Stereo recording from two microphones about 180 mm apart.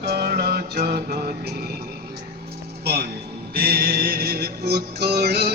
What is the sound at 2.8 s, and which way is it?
Speech, 60° right (ahead or behind).